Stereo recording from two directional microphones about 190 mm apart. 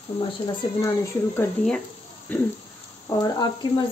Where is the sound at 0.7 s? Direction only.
15° left (ahead or behind).